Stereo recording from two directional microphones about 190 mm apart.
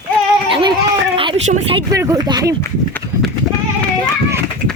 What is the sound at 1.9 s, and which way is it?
Speech, 15° right (ahead or behind).